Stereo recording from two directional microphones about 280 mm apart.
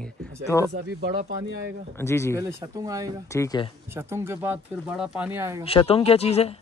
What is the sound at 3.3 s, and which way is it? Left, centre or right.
Speech, centre.